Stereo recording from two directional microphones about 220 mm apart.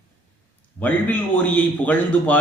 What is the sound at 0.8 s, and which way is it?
A man's voice, 5° left (ahead or behind).